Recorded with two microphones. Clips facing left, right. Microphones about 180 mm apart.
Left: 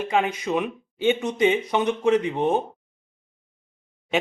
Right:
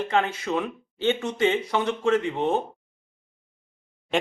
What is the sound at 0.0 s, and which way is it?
Speech, 10° left (ahead or behind).